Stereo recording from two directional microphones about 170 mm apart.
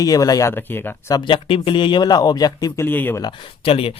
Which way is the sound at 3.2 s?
35° left (ahead or behind).